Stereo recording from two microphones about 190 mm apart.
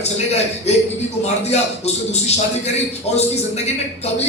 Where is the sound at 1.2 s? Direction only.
35° left (ahead or behind).